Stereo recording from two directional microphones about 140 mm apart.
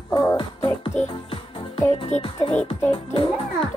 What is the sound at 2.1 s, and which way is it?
Speech, 60° left (ahead or behind).